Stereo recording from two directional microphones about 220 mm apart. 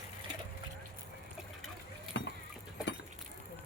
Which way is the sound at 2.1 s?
55° left (ahead or behind).